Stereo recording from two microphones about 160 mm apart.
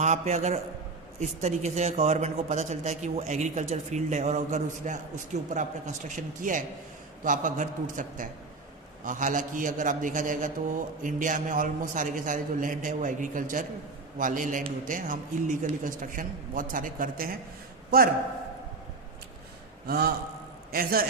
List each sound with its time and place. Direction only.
0.0 s a man's voice: 45° right (ahead or behind); by 17.3 s 60° right (ahead or behind)
19.9 s a man's voice: 75° right (ahead or behind)
20.7 s a man's voice: 65° right (ahead or behind)